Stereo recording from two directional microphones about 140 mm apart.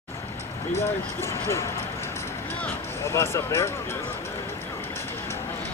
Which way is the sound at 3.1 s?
20° left (ahead or behind).